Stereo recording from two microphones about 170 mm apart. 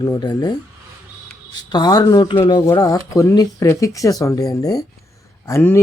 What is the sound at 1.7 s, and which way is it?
Speech, 25° left (ahead or behind).